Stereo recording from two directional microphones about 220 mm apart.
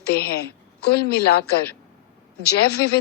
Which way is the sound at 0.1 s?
45° left (ahead or behind).